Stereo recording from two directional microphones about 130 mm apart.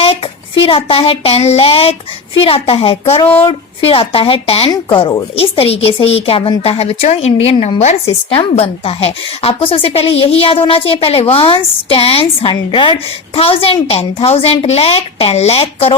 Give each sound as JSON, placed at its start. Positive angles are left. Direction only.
{"t": 0.0, "sound": "a woman's voice", "side_deg": 45}